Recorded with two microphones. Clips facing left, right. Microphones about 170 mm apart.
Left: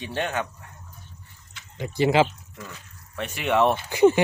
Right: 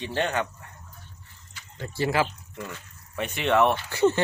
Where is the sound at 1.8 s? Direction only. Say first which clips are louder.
Left 5 dB; 15° left (ahead or behind).